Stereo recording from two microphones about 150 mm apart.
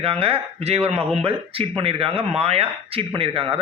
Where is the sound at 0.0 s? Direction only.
40° right (ahead or behind).